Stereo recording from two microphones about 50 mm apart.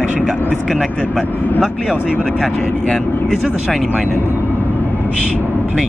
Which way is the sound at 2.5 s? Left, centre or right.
Left.